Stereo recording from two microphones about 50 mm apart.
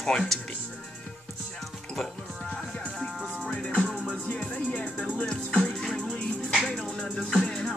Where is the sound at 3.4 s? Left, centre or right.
Left.